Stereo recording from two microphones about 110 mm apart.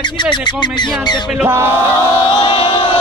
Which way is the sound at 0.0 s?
45° left (ahead or behind).